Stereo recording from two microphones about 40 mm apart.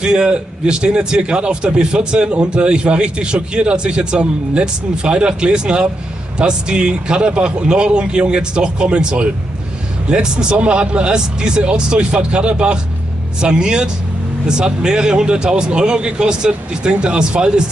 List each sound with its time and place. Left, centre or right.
0.0 s a man's voice: right